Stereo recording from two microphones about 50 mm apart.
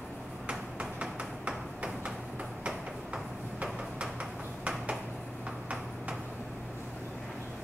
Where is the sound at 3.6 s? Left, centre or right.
Right.